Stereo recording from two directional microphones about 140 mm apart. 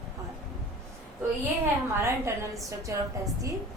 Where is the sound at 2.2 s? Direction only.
20° right (ahead or behind).